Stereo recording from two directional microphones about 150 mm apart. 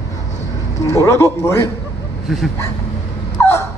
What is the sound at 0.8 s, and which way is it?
Speech, 20° left (ahead or behind).